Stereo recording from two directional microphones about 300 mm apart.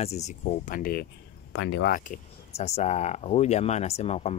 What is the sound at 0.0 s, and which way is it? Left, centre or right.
Speech, left.